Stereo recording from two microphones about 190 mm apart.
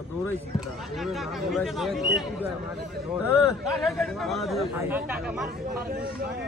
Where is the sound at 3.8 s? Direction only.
Centre (ahead or behind).